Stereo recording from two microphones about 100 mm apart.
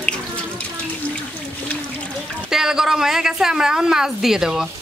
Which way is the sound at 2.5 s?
5° right (ahead or behind).